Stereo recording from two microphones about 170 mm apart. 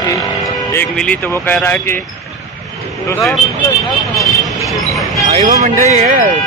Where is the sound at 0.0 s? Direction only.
20° left (ahead or behind).